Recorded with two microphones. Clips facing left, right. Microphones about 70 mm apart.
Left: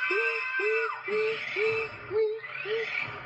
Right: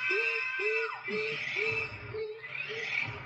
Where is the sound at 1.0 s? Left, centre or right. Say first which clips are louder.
Left 6 dB; left.